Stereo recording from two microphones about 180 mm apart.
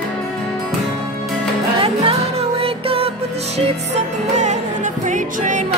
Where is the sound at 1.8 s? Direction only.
30° right (ahead or behind).